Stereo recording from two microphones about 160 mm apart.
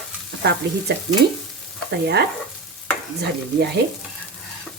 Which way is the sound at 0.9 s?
90° right.